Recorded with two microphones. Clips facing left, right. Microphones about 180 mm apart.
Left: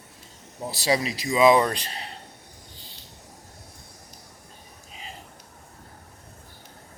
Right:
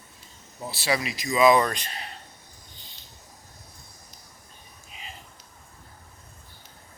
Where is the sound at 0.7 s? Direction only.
40° left (ahead or behind).